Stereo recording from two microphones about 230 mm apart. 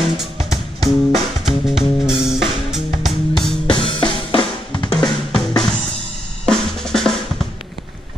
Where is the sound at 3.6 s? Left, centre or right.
Left.